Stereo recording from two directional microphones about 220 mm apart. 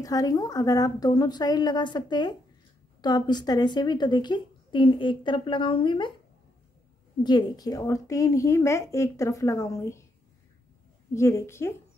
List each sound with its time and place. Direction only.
0.0 s a woman's voice: 15° left (ahead or behind)
7.2 s a woman's voice: 20° left (ahead or behind)
11.1 s a woman's voice: 15° left (ahead or behind)